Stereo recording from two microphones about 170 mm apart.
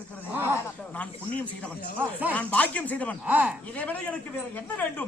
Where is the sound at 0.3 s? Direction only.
10° right (ahead or behind).